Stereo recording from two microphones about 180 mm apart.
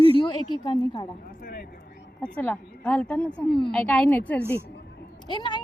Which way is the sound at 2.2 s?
10° left (ahead or behind).